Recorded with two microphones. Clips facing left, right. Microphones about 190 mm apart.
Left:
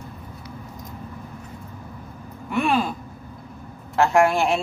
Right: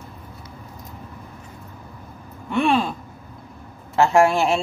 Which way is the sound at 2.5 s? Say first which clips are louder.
Right 2 dB; centre (ahead or behind).